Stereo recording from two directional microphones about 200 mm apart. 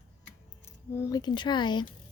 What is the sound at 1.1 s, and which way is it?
Speech, 20° left (ahead or behind).